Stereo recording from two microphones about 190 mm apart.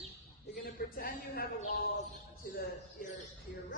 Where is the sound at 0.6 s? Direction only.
50° left (ahead or behind).